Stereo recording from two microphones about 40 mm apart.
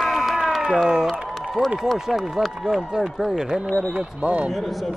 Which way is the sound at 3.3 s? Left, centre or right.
Centre.